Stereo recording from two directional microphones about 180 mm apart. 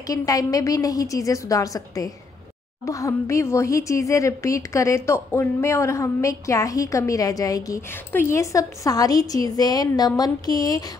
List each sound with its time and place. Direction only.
0.0 s a woman's voice: 20° left (ahead or behind)